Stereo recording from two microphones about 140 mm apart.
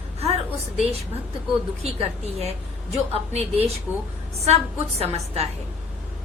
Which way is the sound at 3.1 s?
45° right (ahead or behind).